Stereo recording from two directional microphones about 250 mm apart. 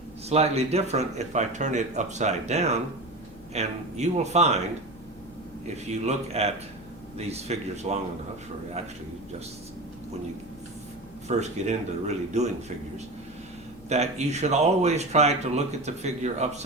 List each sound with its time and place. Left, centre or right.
0.3 s speech: right
5.6 s speech: right
11.3 s speech: right
13.9 s speech: right